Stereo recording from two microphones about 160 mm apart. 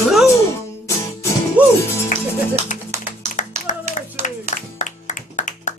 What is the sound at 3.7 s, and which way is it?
Clapping, 50° left (ahead or behind).